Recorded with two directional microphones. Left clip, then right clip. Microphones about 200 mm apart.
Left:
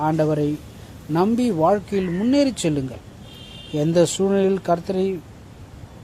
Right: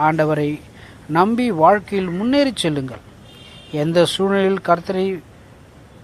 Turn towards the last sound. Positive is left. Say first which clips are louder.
# right 3 dB
turn(degrees=-5)  # may be behind; listen again after turning